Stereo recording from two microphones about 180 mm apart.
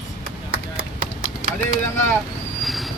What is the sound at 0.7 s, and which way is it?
Clip-clop, 55° right (ahead or behind).